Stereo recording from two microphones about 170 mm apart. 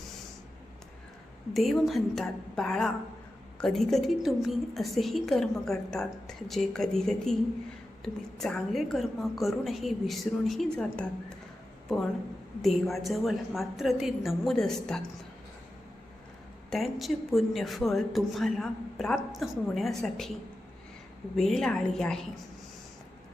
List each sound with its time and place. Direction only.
1.5 s a woman's voice: centre (ahead or behind)
12.6 s a woman's voice: centre (ahead or behind)
16.6 s a woman's voice: centre (ahead or behind)
21.3 s a woman's voice: 5° left (ahead or behind)